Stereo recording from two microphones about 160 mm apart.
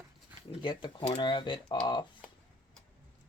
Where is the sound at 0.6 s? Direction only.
30° left (ahead or behind).